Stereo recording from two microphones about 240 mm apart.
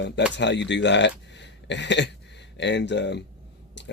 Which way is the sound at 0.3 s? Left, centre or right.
Left.